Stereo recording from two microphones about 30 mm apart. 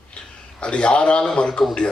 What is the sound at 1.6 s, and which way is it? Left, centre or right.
Speech, centre.